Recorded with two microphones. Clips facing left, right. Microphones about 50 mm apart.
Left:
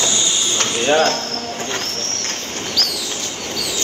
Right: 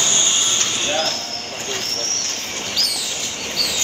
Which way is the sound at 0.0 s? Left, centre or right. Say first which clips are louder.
Left 1 dB; right.